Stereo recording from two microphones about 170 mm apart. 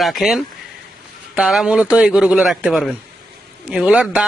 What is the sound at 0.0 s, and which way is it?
Speech, centre (ahead or behind).